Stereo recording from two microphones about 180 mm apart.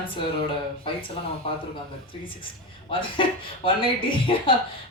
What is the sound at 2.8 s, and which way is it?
Speech, 30° left (ahead or behind).